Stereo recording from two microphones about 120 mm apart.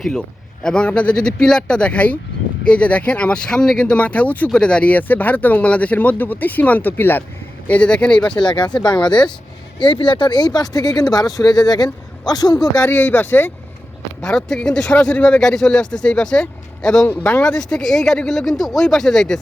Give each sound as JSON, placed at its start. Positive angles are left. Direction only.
{"t": 0.6, "sound": "speech", "side_deg": 5}
{"t": 8.4, "sound": "speech", "side_deg": 40}
{"t": 9.8, "sound": "speech", "side_deg": 40}
{"t": 12.8, "sound": "speech", "side_deg": 15}
{"t": 14.2, "sound": "speech", "side_deg": 5}